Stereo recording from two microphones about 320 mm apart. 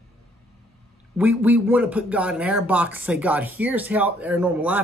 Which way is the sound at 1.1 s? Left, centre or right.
Centre.